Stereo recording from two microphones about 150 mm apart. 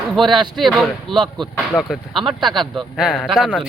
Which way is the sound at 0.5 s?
Centre (ahead or behind).